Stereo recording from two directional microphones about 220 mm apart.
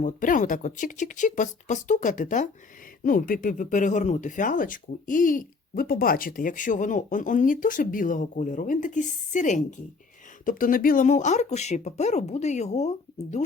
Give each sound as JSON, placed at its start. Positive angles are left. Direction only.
{"t": 0.0, "sound": "speech", "side_deg": 35}